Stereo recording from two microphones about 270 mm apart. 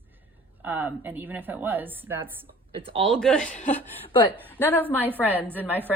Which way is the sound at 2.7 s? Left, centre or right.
Right.